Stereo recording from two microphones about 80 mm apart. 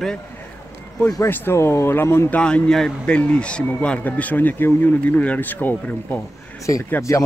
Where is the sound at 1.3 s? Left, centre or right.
Left.